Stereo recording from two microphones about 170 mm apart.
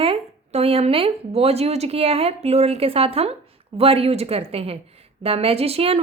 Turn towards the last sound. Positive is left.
turn(degrees=-35)  # may be behind; listen again after turning